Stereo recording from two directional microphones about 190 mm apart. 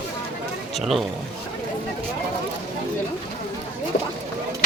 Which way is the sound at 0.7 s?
Centre (ahead or behind).